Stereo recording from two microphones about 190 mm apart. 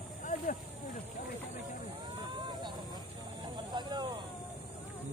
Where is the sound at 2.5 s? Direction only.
25° right (ahead or behind).